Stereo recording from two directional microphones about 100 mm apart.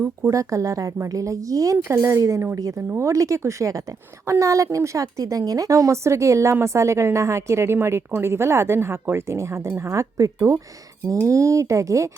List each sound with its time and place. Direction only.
0.3 s a woman's voice: 30° right (ahead or behind)